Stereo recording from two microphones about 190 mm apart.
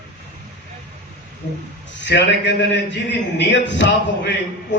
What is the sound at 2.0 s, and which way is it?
A man's voice, 65° left (ahead or behind).